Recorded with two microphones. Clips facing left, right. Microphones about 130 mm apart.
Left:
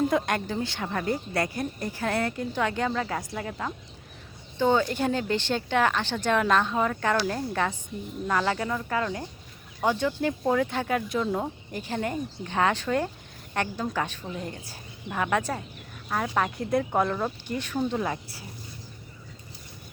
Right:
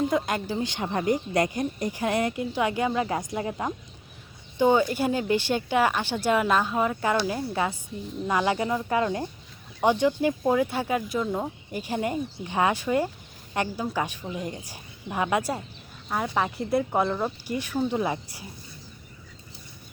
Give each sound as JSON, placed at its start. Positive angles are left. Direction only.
{"t": 0.1, "sound": "speech", "side_deg": 0}